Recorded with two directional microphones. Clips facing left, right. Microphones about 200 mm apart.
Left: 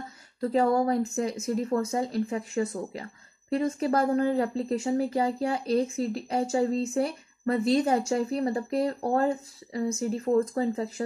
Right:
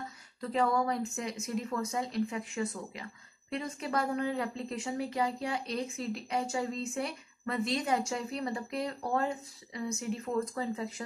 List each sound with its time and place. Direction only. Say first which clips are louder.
0.4 s speech: left 6 dB; 35° left (ahead or behind)